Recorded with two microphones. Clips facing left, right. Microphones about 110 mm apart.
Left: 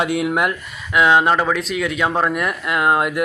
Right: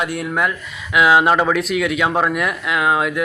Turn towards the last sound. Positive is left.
turn(degrees=0)  # may be behind; listen again after turning